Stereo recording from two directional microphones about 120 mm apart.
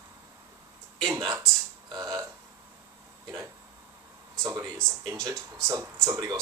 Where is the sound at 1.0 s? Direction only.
30° right (ahead or behind).